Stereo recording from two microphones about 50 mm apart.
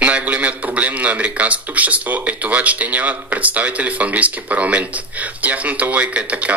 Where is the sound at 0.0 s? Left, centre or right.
Right.